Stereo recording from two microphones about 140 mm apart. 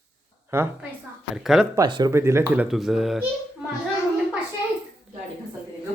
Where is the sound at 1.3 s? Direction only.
5° right (ahead or behind).